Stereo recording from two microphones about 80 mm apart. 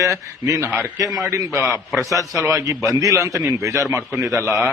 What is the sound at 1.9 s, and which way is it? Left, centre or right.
Speech, centre.